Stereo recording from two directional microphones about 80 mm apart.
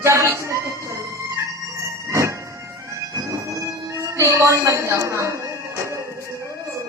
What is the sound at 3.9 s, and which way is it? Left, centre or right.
Music, right.